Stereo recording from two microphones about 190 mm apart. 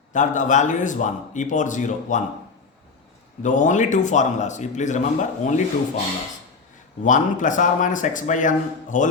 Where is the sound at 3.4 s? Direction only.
40° left (ahead or behind).